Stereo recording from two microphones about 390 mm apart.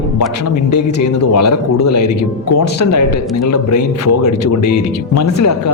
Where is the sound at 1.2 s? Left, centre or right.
Left.